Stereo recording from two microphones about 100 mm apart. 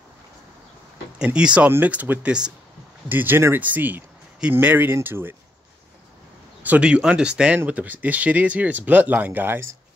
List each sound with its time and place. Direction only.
1.2 s speech: 10° right (ahead or behind)
6.6 s speech: 15° right (ahead or behind)